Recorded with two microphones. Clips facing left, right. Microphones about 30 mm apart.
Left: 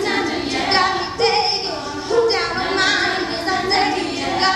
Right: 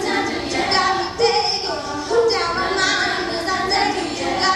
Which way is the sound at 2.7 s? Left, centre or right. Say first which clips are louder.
Left 4 dB; left.